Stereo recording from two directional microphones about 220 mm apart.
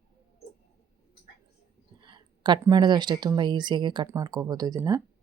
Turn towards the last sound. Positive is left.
turn(degrees=-15)  # may be behind; listen again after turning